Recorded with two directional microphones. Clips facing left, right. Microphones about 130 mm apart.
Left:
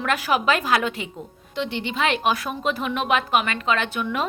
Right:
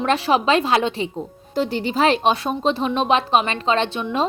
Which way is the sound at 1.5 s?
40° right (ahead or behind).